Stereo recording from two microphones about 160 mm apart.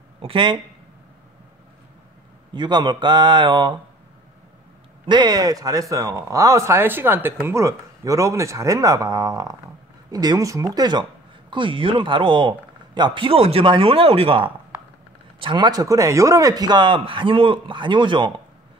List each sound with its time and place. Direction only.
0.2 s speech: 30° right (ahead or behind)
2.5 s speech: 25° right (ahead or behind)
5.0 s speech: 30° right (ahead or behind)